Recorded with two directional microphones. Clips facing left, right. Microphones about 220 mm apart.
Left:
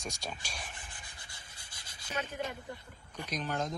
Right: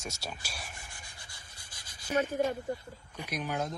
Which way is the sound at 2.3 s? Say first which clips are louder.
Right 9 dB; 45° right (ahead or behind).